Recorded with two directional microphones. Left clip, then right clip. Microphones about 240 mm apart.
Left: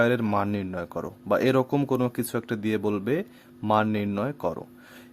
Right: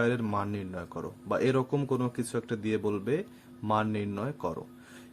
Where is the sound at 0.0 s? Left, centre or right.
Left.